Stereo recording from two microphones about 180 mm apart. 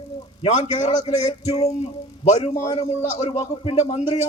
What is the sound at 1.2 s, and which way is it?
A man's voice, 35° left (ahead or behind).